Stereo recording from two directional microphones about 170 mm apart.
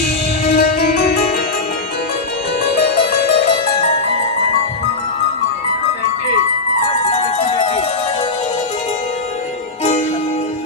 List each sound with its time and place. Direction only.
0.6 s music: 60° left (ahead or behind)
7.0 s music: 40° left (ahead or behind)